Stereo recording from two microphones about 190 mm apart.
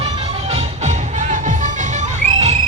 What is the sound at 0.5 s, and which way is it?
Music, 40° right (ahead or behind).